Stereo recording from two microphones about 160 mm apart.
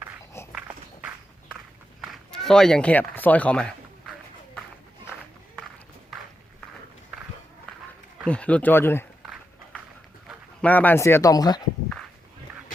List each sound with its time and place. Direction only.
0.4 s walk: 15° left (ahead or behind)
2.0 s speech: 5° left (ahead or behind)
8.2 s speech: 5° left (ahead or behind)
9.2 s a sound: centre (ahead or behind)
10.2 s speech: 10° left (ahead or behind); by 11.6 s 25° left (ahead or behind)